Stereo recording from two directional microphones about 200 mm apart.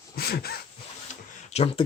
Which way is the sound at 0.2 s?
50° left (ahead or behind).